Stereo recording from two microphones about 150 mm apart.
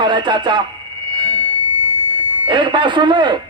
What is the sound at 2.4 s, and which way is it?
Speech, 30° right (ahead or behind).